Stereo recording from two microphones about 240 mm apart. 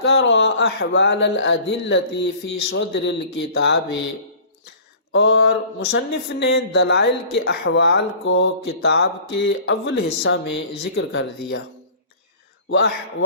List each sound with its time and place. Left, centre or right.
0.0 s speech: left
5.1 s speech: left
12.7 s speech: left